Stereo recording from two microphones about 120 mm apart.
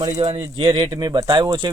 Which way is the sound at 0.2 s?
35° right (ahead or behind).